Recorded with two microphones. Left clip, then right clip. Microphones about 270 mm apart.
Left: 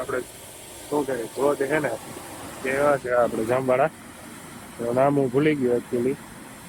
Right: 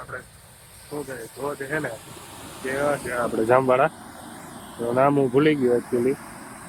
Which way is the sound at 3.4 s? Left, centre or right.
Centre.